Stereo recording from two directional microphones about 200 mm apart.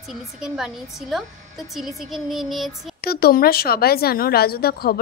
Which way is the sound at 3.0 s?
50° left (ahead or behind).